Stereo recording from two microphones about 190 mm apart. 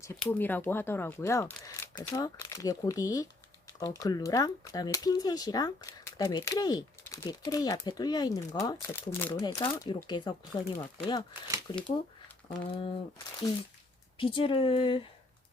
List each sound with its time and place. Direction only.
0.2 s speech: 10° left (ahead or behind); by 12.9 s 30° left (ahead or behind)
14.2 s speech: 25° left (ahead or behind)